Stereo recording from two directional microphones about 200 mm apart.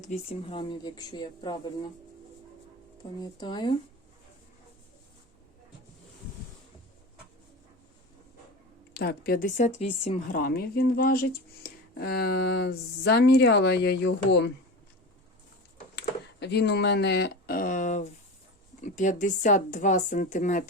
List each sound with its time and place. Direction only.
0.0 s speech: 30° left (ahead or behind)
3.2 s speech: 20° left (ahead or behind)
8.9 s speech: 50° left (ahead or behind)
9.6 s speech: 35° left (ahead or behind)
10.3 s speech: 45° left (ahead or behind)
16.0 s speech: 55° left (ahead or behind); by 20.7 s 40° left (ahead or behind)